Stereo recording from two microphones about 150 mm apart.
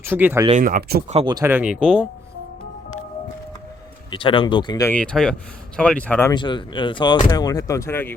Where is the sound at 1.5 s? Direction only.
10° right (ahead or behind).